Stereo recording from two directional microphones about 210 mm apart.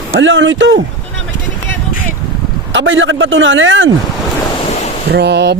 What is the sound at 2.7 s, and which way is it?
A man's voice, 65° right (ahead or behind).